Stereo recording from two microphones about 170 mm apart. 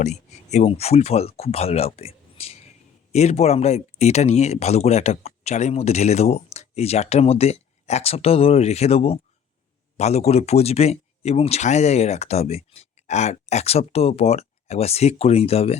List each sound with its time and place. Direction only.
0.0 s speech: 40° left (ahead or behind)